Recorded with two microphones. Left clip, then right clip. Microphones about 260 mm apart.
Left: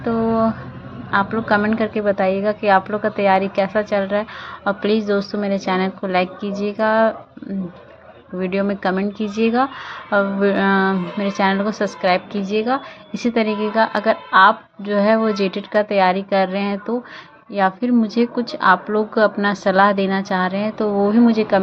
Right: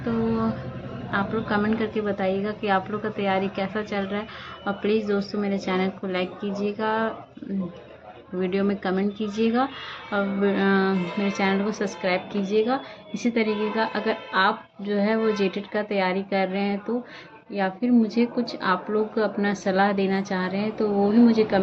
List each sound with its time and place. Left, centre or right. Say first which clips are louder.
0.0 s a sound: left 8 dB; centre
1.1 s a woman's voice: left 8 dB; centre
8.4 s a woman's voice: left 4 dB; centre